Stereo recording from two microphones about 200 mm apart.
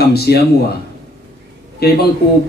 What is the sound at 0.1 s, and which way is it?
Speech, 55° left (ahead or behind).